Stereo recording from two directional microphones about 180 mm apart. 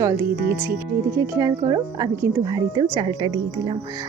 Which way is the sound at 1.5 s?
30° right (ahead or behind).